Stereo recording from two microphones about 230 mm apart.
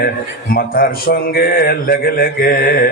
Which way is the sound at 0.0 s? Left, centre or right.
Left.